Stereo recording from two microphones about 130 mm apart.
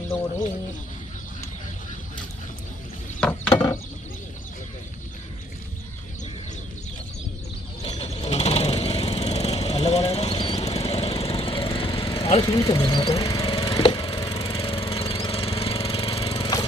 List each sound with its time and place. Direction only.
3.2 s mechanisms: 10° left (ahead or behind)
7.8 s vehicle: 55° left (ahead or behind)
10.3 s vehicle: 40° left (ahead or behind)
10.6 s lawn mower: 55° left (ahead or behind)
12.5 s speech: 30° left (ahead or behind)
13.2 s a sound: 30° left (ahead or behind)
13.5 s vehicle: 40° left (ahead or behind)
13.8 s lawn mower: 40° left (ahead or behind)
14.4 s engine: 45° left (ahead or behind)
16.4 s lawn mower: 30° left (ahead or behind)